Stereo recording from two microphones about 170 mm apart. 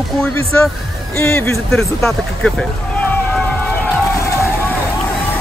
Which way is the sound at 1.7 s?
5° left (ahead or behind).